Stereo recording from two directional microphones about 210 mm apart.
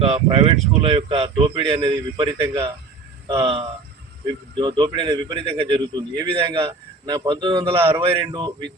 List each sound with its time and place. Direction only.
0.0 s a man's voice: 25° right (ahead or behind)
4.6 s a man's voice: 20° right (ahead or behind)